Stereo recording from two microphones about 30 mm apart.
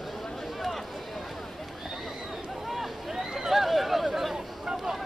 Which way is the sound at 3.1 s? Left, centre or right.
Centre.